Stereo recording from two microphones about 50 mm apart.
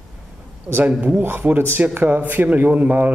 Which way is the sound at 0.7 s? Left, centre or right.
Right.